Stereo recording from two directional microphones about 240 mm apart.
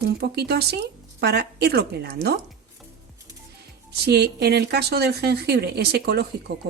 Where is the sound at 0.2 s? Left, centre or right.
Right.